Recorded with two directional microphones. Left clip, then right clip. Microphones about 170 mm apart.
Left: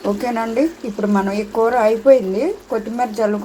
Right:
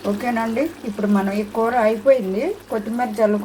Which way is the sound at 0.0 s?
15° left (ahead or behind).